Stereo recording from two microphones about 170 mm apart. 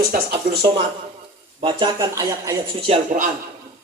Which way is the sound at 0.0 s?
65° right (ahead or behind).